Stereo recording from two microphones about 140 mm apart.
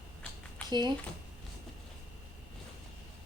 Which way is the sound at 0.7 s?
30° right (ahead or behind).